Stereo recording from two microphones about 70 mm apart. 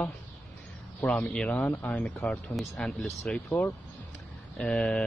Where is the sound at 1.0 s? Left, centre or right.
Centre.